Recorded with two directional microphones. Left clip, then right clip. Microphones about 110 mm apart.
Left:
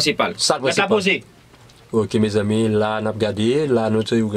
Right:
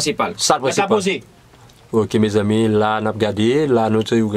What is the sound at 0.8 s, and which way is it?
Speech, 5° right (ahead or behind).